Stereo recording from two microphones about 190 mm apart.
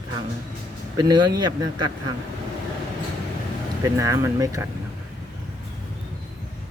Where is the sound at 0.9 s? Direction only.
25° right (ahead or behind).